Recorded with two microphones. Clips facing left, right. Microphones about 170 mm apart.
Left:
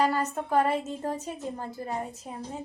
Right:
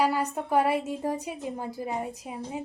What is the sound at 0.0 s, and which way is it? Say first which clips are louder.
A woman's voice: even; 10° right (ahead or behind).